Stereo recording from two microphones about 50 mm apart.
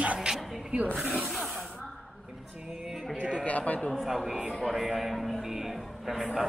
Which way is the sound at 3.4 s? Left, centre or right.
Left.